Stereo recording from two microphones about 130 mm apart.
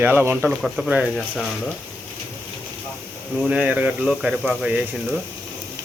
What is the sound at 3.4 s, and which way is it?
Speech, 5° right (ahead or behind).